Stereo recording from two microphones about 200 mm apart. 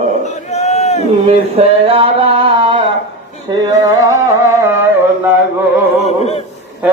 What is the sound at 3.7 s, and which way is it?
Carnatic music, 15° right (ahead or behind).